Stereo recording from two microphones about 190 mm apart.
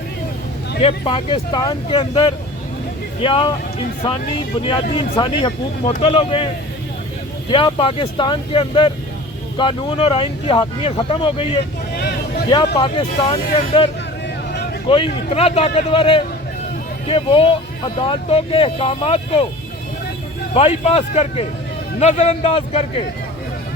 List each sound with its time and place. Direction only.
0.8 s speech: 30° left (ahead or behind)
4.6 s speech: 25° left (ahead or behind)
7.5 s speech: 25° left (ahead or behind)
11.9 s vehicle: 60° left (ahead or behind)
12.5 s speech: 25° left (ahead or behind)
20.5 s speech: 30° left (ahead or behind)